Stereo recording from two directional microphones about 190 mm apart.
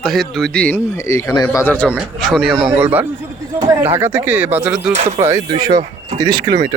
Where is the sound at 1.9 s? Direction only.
5° right (ahead or behind).